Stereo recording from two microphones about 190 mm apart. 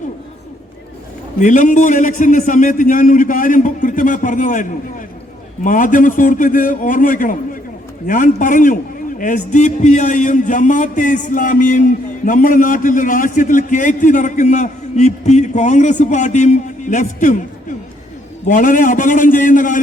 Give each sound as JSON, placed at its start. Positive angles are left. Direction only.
{"t": 1.4, "sound": "a man's voice", "side_deg": 40}